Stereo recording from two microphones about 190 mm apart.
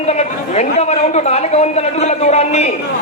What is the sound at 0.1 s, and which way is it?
A man's voice, 35° left (ahead or behind).